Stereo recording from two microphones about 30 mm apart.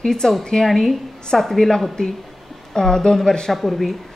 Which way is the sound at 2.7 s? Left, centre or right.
Left.